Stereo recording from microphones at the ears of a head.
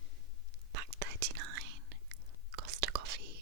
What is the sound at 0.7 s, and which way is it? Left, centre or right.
Whispering, right.